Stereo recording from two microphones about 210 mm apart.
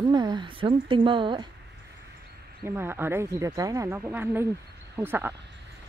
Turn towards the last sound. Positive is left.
turn(degrees=-10)  # may be behind; listen again after turning